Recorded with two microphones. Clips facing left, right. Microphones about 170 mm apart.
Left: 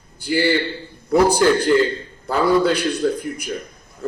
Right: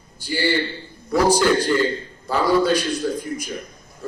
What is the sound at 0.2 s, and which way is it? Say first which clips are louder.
A man's voice: left 3 dB; 60° left (ahead or behind).